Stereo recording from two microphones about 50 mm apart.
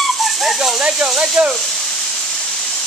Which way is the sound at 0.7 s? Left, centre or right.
Centre.